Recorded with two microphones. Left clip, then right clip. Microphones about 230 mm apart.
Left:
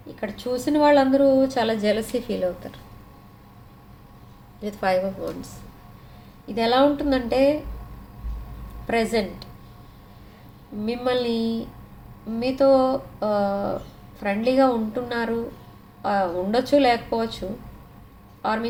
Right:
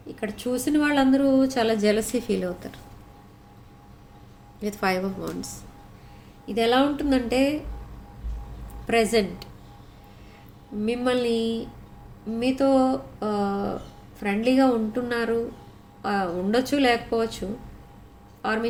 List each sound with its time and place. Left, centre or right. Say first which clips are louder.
0.2 s a woman's voice: left 1 dB; right
4.6 s a woman's voice: left 3 dB; right
6.5 s speech: left 2 dB; right
8.9 s a woman's voice: right 1 dB; right
10.8 s a woman's voice: even; right
18.4 s a woman's voice: left 1 dB; right